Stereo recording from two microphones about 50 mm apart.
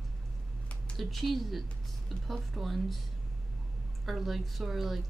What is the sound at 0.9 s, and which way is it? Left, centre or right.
Speech, centre.